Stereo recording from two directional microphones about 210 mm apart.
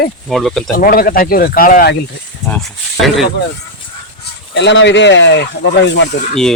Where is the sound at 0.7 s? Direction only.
45° left (ahead or behind).